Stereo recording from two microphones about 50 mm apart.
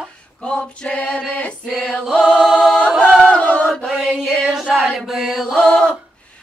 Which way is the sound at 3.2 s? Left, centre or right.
Left.